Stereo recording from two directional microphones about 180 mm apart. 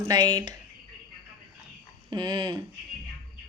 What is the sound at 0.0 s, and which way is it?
Speech, 25° right (ahead or behind).